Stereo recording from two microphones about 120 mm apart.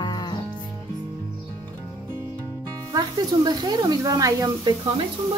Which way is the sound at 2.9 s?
35° right (ahead or behind).